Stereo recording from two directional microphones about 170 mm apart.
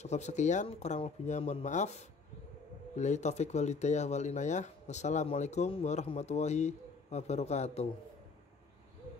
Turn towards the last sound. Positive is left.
turn(degrees=40)  # may be behind; listen again after turning